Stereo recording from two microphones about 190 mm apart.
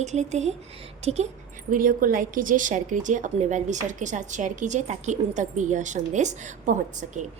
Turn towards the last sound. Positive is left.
turn(degrees=-40)  # may be behind; listen again after turning